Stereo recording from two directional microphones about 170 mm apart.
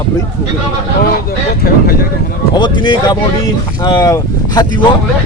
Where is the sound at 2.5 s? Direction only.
25° left (ahead or behind).